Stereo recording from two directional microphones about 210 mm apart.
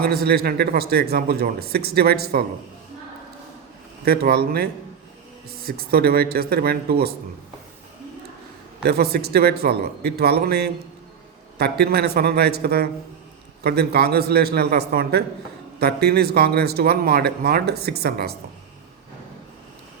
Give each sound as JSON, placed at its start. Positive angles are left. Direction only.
{"t": 0.0, "sound": "speech", "side_deg": -50}
{"t": 4.0, "sound": "speech", "side_deg": -50}
{"t": 8.8, "sound": "speech", "side_deg": -50}